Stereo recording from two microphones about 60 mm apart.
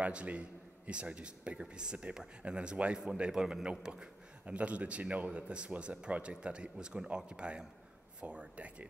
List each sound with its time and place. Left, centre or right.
0.0 s a man's voice: right